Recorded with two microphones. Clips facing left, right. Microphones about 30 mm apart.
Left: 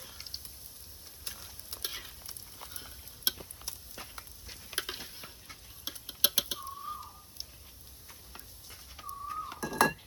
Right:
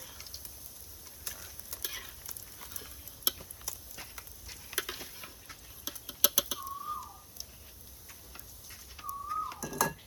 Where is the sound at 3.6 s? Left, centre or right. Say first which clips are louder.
Even; left.